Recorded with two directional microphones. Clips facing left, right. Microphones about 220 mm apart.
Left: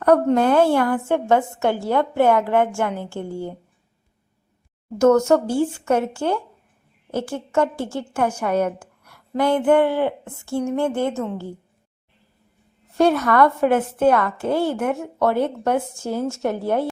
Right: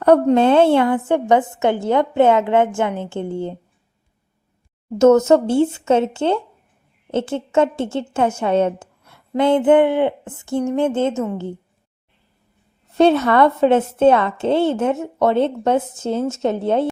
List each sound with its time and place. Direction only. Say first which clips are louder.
0.3 s a woman's voice: right 3 dB; 25° right (ahead or behind)
4.9 s a woman's voice: right 3 dB; 20° right (ahead or behind)
11.1 s a woman's voice: right 3 dB; centre (ahead or behind)
13.0 s a woman's voice: right 3 dB; 25° right (ahead or behind)